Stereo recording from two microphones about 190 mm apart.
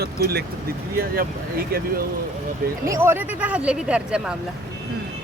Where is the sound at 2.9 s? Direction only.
10° right (ahead or behind).